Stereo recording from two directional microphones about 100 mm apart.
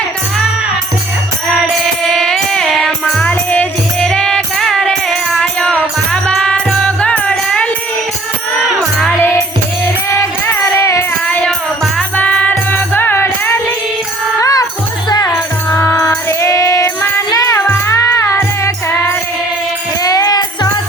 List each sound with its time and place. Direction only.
2.0 s music: 5° left (ahead or behind)
10.2 s music: 30° left (ahead or behind)
11.3 s music: 15° left (ahead or behind)
14.4 s music: 35° left (ahead or behind)
20.0 s music: 40° left (ahead or behind)